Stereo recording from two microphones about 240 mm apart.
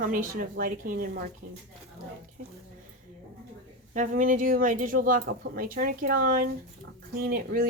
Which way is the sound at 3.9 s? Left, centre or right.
Right.